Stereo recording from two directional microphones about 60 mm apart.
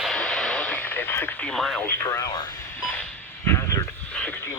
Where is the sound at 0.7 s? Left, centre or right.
Left.